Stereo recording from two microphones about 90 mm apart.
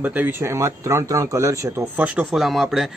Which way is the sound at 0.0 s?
20° right (ahead or behind).